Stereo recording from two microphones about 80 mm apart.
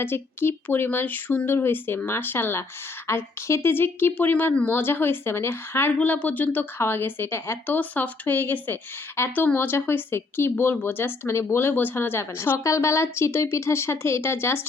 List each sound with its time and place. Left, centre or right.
0.0 s a woman's voice: left
6.0 s a woman's voice: centre
7.8 s a woman's voice: left
12.5 s a woman's voice: left